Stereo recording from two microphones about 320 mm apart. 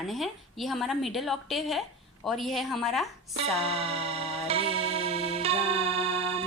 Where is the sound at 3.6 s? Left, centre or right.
Centre.